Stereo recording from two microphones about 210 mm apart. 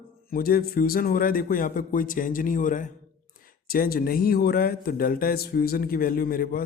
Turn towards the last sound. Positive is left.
turn(degrees=45)  # may be behind; listen again after turning